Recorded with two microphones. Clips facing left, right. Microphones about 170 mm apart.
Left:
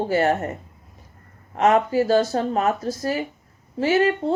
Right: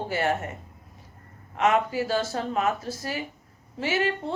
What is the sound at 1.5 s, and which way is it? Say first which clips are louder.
Speech: left 5 dB; 40° left (ahead or behind).